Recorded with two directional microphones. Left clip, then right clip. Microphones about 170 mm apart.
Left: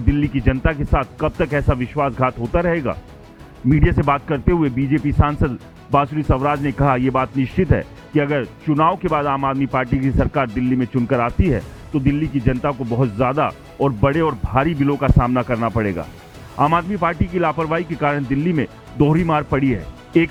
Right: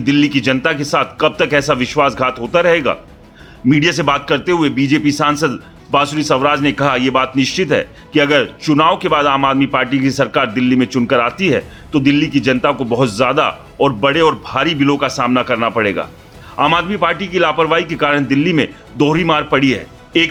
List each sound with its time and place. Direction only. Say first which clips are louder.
0.0 s a man's voice: right 7 dB; 40° left (ahead or behind)